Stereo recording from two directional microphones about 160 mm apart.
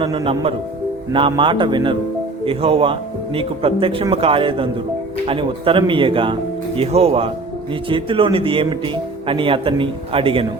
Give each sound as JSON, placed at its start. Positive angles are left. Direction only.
{"t": 0.0, "sound": "speech", "side_deg": -30}